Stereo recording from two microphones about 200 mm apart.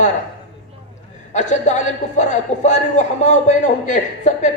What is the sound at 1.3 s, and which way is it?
A man's voice, 35° left (ahead or behind).